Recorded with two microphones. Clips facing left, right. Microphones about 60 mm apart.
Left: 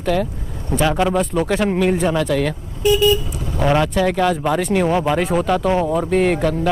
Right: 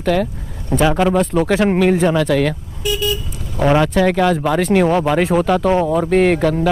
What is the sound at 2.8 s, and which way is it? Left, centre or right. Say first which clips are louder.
Vehicle: left 6 dB; left.